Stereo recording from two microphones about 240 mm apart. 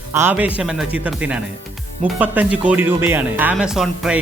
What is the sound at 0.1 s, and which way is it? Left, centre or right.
Speech, centre.